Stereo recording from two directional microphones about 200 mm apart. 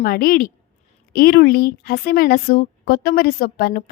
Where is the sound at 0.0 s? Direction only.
50° left (ahead or behind).